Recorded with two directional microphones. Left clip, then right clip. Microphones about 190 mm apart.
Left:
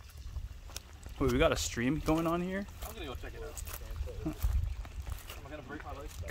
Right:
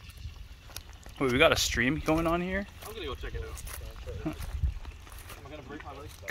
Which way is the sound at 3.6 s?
Centre (ahead or behind).